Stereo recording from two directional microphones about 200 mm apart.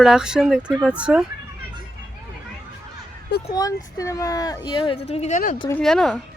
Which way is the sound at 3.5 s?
15° left (ahead or behind).